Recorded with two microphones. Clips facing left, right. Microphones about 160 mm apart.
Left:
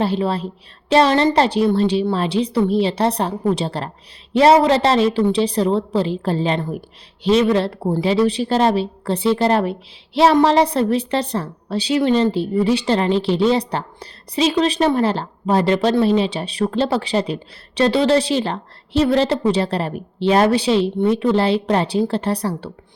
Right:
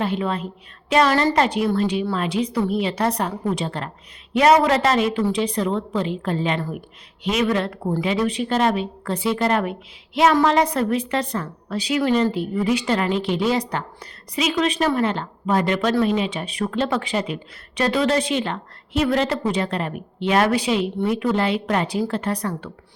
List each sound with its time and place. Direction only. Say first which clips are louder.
0.0 s a woman's voice: left 4 dB; 30° left (ahead or behind)